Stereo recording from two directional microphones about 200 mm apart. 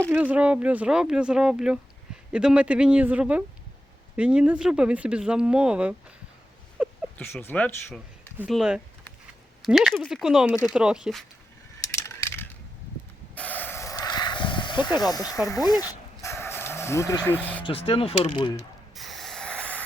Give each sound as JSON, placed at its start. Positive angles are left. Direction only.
{"t": 0.1, "sound": "speech", "side_deg": -5}
{"t": 6.8, "sound": "a sound", "side_deg": -5}
{"t": 7.2, "sound": "speech", "side_deg": 10}
{"t": 11.8, "sound": "coin", "side_deg": 15}
{"t": 13.3, "sound": "a sound", "side_deg": 5}
{"t": 15.4, "sound": "dog", "side_deg": 20}
{"t": 17.6, "sound": "mechanisms", "side_deg": 30}
{"t": 18.9, "sound": "snort", "side_deg": 0}